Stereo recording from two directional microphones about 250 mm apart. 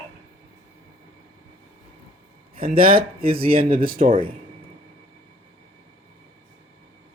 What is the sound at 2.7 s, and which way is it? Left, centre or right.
A man's voice, right.